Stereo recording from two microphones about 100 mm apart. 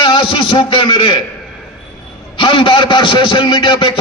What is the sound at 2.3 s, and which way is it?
A man's voice, 60° left (ahead or behind).